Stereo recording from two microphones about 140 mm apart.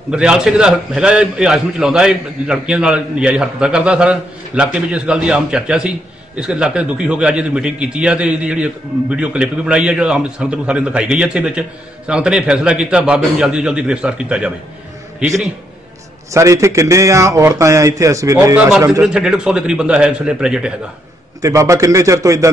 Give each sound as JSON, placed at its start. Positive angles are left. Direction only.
{"t": 0.1, "sound": "a man's voice", "side_deg": -5}
{"t": 16.3, "sound": "speech", "side_deg": -20}
{"t": 18.9, "sound": "a man's voice", "side_deg": -5}
{"t": 21.4, "sound": "speech", "side_deg": -20}